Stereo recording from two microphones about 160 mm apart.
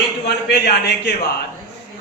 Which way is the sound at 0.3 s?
90° left.